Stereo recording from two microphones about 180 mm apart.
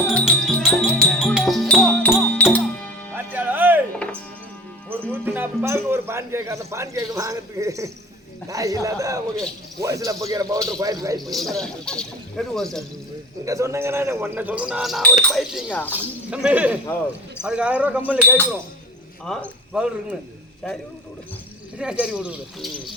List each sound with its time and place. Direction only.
0.1 s music: 5° left (ahead or behind)
3.2 s music: 10° right (ahead or behind)
5.2 s a man's voice: 10° right (ahead or behind)
11.3 s speech: centre (ahead or behind)
13.4 s a man's voice: 15° right (ahead or behind)
19.2 s a man's voice: centre (ahead or behind)